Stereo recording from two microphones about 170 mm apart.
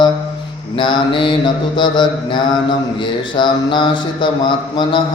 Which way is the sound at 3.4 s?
30° left (ahead or behind).